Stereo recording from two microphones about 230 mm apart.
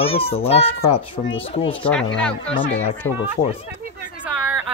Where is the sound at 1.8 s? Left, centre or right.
Centre.